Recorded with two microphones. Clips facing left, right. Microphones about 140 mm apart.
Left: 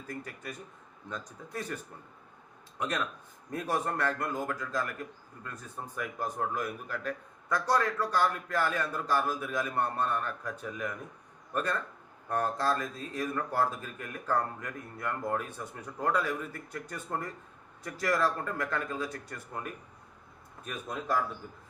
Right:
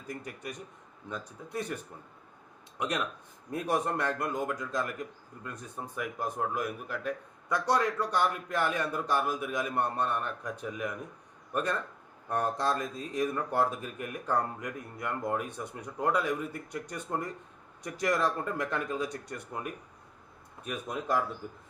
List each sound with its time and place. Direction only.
2.7 s speech: 15° right (ahead or behind)
20.7 s speech: 15° right (ahead or behind)